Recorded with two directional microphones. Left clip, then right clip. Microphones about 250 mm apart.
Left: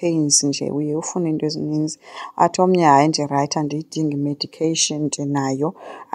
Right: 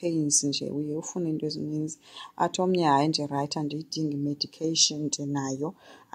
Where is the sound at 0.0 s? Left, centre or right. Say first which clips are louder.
Left 8 dB; left.